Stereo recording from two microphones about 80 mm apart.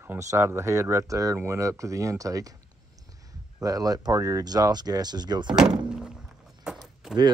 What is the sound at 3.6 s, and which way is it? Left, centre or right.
Speech, right.